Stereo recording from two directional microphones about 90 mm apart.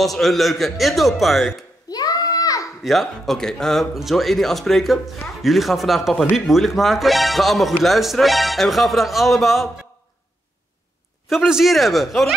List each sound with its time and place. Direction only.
0.0 s speech: centre (ahead or behind)
1.9 s a sound: 45° left (ahead or behind)
2.8 s speech: centre (ahead or behind)
11.2 s speech: 5° right (ahead or behind)